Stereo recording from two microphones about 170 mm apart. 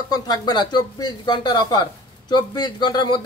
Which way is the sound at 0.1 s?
25° left (ahead or behind).